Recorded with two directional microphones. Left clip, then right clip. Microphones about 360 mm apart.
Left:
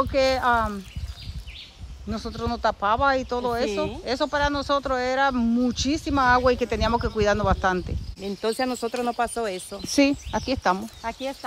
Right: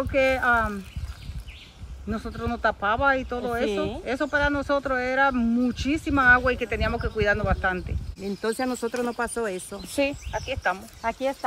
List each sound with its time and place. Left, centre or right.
0.1 s speech: centre
2.0 s speech: centre
11.0 s speech: centre